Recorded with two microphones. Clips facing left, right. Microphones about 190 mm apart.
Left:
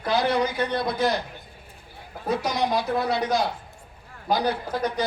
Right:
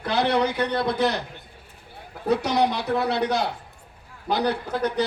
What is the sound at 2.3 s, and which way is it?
A man's voice, 65° right (ahead or behind).